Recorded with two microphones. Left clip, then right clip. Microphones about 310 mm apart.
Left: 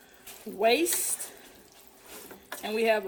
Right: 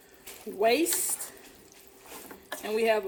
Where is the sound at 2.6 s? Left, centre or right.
Left.